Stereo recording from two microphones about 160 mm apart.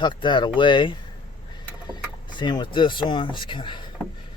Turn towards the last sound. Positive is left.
turn(degrees=30)  # may be behind; listen again after turning